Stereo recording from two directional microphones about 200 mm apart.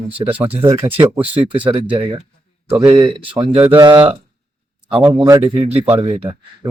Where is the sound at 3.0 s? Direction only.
25° right (ahead or behind).